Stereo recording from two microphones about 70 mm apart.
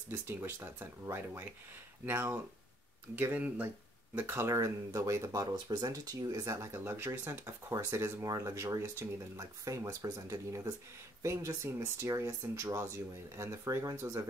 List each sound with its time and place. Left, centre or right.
1.0 s speech: right
2.0 s speech: right
4.5 s speech: right
6.2 s speech: right